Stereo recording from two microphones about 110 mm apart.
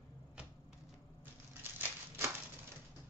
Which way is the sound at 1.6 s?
20° right (ahead or behind).